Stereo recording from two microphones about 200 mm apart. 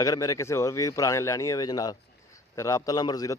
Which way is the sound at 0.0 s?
15° left (ahead or behind).